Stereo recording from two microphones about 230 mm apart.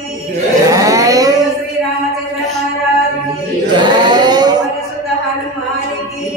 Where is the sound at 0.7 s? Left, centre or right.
Centre.